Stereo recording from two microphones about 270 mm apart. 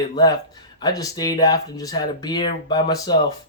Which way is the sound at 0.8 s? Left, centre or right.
Centre.